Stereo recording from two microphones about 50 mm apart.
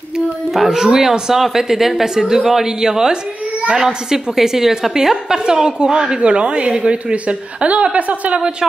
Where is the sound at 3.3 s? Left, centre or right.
Right.